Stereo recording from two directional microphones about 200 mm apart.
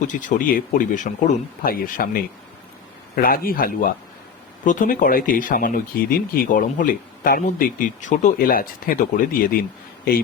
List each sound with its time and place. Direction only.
0.0 s speech: 40° left (ahead or behind)